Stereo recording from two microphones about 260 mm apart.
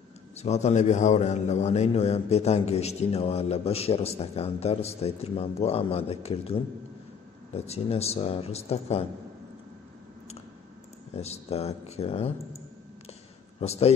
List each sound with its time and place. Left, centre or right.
0.4 s a man's voice: left
11.1 s a man's voice: left
13.6 s a man's voice: left